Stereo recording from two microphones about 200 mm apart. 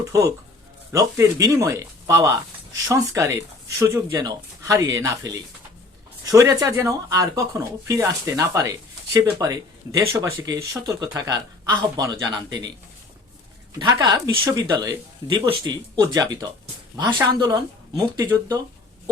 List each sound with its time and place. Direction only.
0.0 s speech: 15° right (ahead or behind)
13.7 s speech: 20° right (ahead or behind)